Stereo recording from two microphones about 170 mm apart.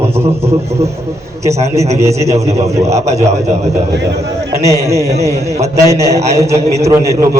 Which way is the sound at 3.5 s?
40° right (ahead or behind).